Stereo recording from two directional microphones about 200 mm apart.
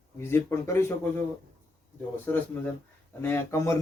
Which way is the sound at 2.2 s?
10° left (ahead or behind).